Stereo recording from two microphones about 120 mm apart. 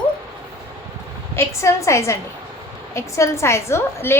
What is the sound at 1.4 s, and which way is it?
A woman's voice, 25° left (ahead or behind).